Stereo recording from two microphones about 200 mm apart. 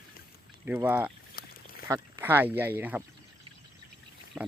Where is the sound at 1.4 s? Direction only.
50° left (ahead or behind).